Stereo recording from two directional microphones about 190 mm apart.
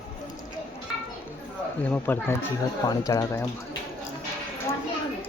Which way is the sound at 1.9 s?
10° left (ahead or behind).